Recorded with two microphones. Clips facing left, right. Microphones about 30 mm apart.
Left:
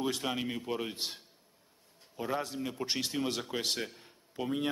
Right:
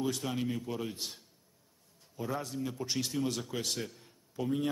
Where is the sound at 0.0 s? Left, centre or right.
Left.